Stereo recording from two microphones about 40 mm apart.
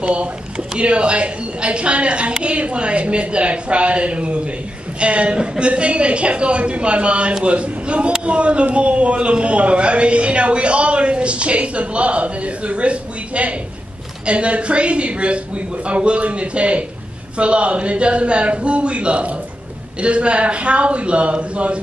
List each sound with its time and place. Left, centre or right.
0.0 s a man's voice: right